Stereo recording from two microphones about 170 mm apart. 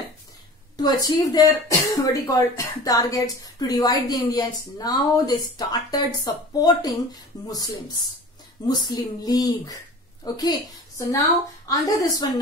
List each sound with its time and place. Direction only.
0.7 s speech: 20° left (ahead or behind)